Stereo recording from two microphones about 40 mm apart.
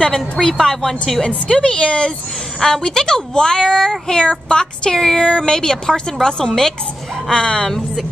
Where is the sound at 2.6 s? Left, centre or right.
Centre.